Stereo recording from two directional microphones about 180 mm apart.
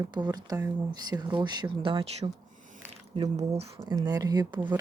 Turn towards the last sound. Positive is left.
turn(degrees=-20)  # may be behind; listen again after turning